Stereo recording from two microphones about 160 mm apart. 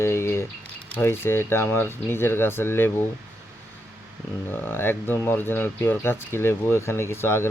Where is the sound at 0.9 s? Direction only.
15° left (ahead or behind).